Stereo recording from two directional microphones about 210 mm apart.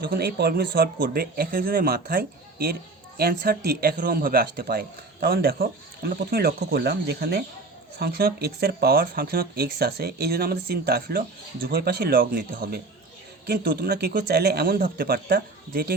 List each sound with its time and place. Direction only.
0.0 s speech: 45° right (ahead or behind)